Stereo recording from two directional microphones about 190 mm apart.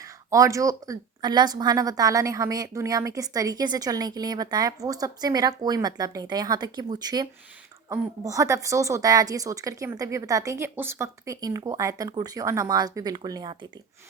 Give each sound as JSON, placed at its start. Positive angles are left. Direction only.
{"t": 0.0, "sound": "a woman's voice", "side_deg": -15}